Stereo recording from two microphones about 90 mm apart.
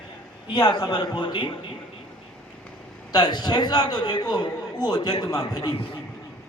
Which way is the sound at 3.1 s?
50° left (ahead or behind).